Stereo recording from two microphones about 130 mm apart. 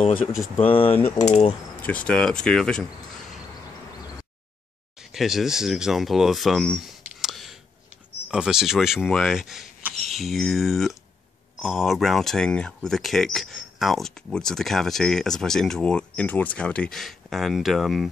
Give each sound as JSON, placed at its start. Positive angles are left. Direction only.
{"t": 0.6, "sound": "speech", "side_deg": 45}
{"t": 1.1, "sound": "a sound", "side_deg": 55}
{"t": 1.8, "sound": "speech", "side_deg": 10}
{"t": 5.1, "sound": "speech", "side_deg": 0}